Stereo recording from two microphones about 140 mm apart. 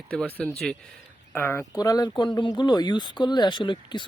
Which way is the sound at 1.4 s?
15° left (ahead or behind).